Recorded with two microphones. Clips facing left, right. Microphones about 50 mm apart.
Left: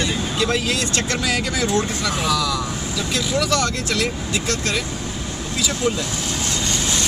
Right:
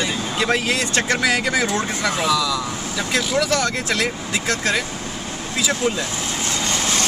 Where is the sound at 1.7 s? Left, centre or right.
Right.